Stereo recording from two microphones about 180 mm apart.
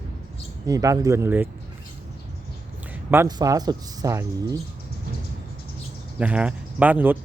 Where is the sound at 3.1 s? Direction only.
15° right (ahead or behind).